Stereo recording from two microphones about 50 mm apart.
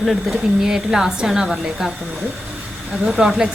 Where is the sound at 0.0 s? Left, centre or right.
Centre.